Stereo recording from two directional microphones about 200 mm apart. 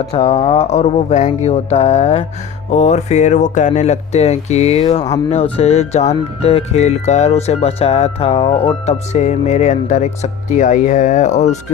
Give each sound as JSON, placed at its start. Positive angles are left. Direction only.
{"t": 0.1, "sound": "speech", "side_deg": 30}